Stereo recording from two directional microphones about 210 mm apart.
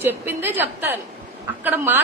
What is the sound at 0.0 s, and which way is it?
A woman's voice, 10° right (ahead or behind).